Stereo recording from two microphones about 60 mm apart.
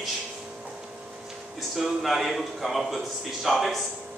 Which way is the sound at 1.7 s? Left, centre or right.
Centre.